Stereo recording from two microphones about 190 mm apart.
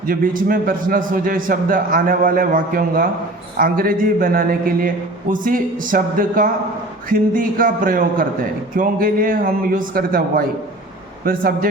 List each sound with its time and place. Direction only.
0.1 s a man's voice: 50° right (ahead or behind)